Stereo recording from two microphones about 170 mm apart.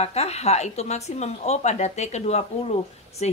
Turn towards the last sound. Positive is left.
turn(degrees=40)  # may be behind; listen again after turning